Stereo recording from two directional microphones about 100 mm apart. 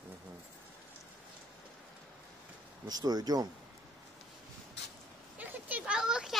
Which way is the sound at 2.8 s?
40° right (ahead or behind).